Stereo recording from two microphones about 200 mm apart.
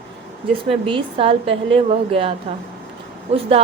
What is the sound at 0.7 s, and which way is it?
A woman's voice, 25° right (ahead or behind).